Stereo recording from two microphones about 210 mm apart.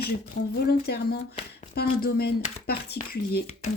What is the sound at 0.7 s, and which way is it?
Speech, 50° left (ahead or behind).